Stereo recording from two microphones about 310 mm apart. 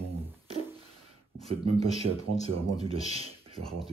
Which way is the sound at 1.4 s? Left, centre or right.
Centre.